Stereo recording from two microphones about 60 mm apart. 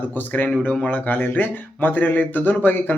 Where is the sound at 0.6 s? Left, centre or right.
Left.